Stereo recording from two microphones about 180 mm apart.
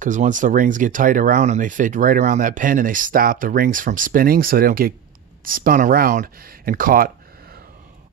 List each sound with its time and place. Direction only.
0.0 s speech: 45° right (ahead or behind)